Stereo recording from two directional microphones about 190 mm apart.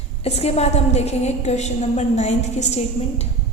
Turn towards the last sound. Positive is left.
turn(degrees=35)  # may be behind; listen again after turning